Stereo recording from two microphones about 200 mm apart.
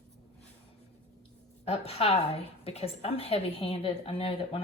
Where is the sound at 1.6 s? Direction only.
30° left (ahead or behind).